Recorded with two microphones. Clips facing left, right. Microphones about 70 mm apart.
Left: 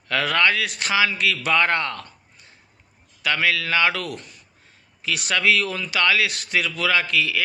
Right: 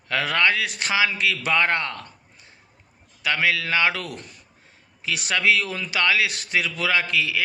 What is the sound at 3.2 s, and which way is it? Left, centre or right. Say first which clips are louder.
A man's voice: even; right.